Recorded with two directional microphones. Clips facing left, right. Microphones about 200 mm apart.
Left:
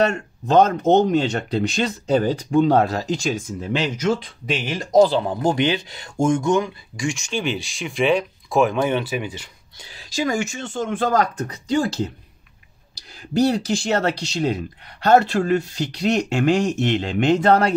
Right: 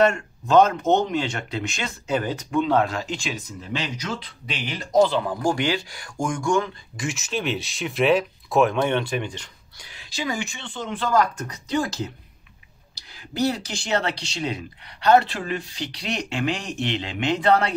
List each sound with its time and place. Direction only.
0.1 s speech: 35° left (ahead or behind); by 6.7 s 20° left (ahead or behind)
7.0 s speech: 5° right (ahead or behind)
9.8 s a sound: 30° left (ahead or behind)
10.0 s speech: 45° left (ahead or behind)
11.3 s speech: 30° left (ahead or behind)
14.0 s speech: 40° left (ahead or behind)